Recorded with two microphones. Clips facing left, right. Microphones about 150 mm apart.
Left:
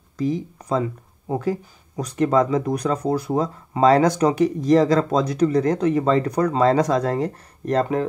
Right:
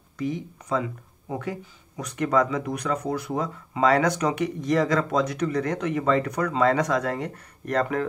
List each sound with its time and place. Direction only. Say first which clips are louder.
0.2 s speech: left 5 dB; 35° left (ahead or behind)